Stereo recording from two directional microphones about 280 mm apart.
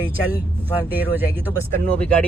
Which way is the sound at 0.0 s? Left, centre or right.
Centre.